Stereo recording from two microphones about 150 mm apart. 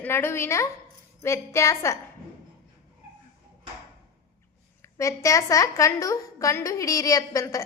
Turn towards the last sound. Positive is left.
turn(degrees=20)  # may be behind; listen again after turning